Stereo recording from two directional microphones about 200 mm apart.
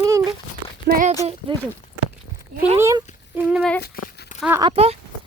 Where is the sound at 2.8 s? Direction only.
15° right (ahead or behind).